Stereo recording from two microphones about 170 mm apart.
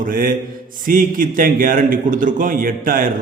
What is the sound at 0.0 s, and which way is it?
A man's voice, 55° right (ahead or behind).